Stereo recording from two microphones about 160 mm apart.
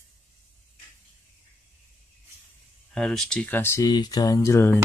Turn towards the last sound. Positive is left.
turn(degrees=15)  # may be behind; listen again after turning